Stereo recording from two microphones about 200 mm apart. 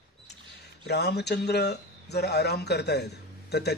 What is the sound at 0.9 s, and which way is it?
Speech, 55° left (ahead or behind).